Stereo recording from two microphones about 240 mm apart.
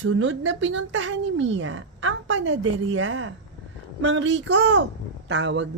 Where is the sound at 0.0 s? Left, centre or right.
Right.